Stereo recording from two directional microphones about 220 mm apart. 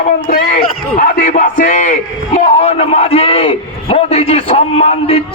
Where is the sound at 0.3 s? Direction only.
40° left (ahead or behind).